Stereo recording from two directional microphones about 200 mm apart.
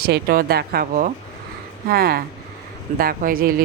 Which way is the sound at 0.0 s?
50° right (ahead or behind).